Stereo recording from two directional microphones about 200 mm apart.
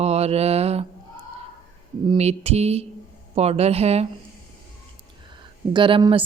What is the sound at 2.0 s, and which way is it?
A woman's voice, 30° right (ahead or behind).